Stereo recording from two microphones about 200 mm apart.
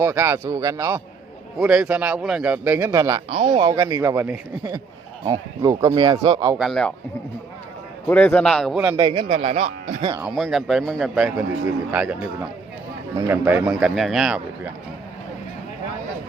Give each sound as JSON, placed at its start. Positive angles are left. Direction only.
{"t": 0.0, "sound": "a man's voice", "side_deg": -10}
{"t": 6.6, "sound": "a man's voice", "side_deg": 0}
{"t": 8.0, "sound": "a man's voice", "side_deg": 5}
{"t": 9.0, "sound": "speech", "side_deg": -20}
{"t": 10.2, "sound": "a man's voice", "side_deg": 0}
{"t": 13.1, "sound": "a man's voice", "side_deg": -10}